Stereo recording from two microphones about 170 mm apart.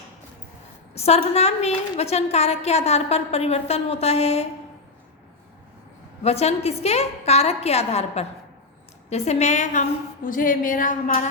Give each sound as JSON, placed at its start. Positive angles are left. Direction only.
{"t": 0.9, "sound": "a woman's voice", "side_deg": 40}
{"t": 6.2, "sound": "a woman's voice", "side_deg": 40}
{"t": 10.2, "sound": "a sound", "side_deg": 55}